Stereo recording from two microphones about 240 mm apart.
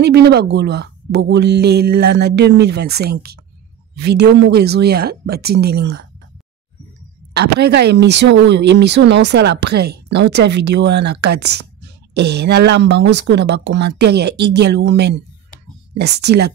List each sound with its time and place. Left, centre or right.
0.0 s speech: right
7.3 s speech: right